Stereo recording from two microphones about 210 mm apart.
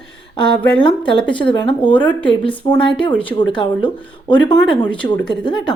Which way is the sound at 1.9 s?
10° left (ahead or behind).